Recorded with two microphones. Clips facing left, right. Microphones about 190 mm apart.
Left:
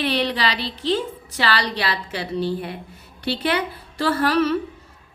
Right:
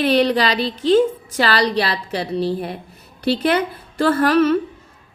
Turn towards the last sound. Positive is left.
turn(degrees=-50)  # may be behind; listen again after turning